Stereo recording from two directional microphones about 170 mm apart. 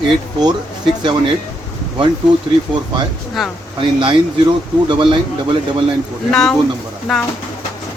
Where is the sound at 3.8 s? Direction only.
30° right (ahead or behind).